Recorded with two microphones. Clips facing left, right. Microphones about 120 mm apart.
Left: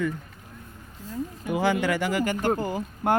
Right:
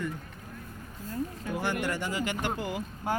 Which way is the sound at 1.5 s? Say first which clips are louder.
Left 8 dB; 90° left.